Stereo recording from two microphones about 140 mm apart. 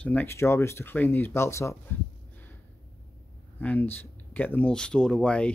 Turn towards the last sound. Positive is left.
turn(degrees=5)  # may be behind; listen again after turning